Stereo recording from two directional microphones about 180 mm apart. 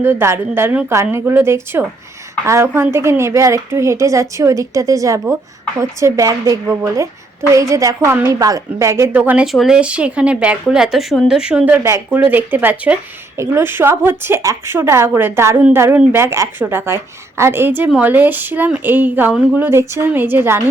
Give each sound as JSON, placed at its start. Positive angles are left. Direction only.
{"t": 0.0, "sound": "a woman's voice", "side_deg": -15}